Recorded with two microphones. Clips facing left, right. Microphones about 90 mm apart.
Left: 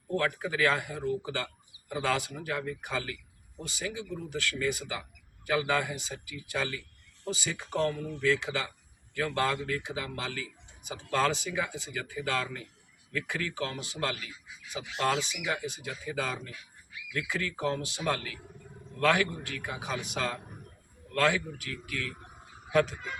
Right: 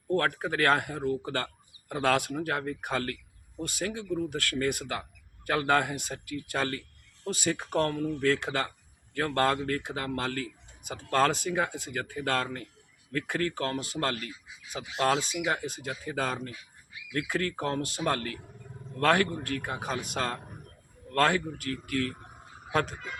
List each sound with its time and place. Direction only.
0.2 s a man's voice: 50° right (ahead or behind)